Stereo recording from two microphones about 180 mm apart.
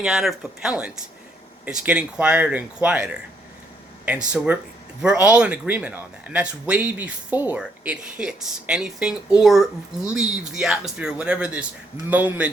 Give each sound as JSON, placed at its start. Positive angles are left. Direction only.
{"t": 0.0, "sound": "speech", "side_deg": 0}
{"t": 4.3, "sound": "speech", "side_deg": -5}